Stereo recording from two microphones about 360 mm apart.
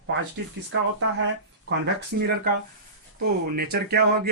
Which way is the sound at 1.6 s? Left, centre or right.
Right.